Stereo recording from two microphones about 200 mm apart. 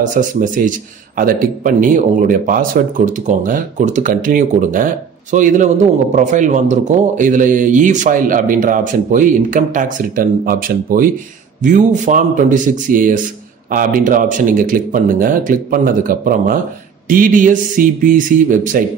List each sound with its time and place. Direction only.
0.0 s a man's voice: 40° right (ahead or behind)